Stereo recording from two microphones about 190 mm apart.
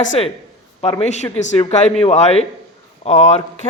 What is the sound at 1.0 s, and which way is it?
Speech, 35° left (ahead or behind).